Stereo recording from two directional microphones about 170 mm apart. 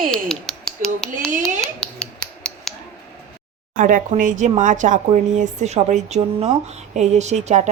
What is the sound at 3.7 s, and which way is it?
Speech, 50° right (ahead or behind).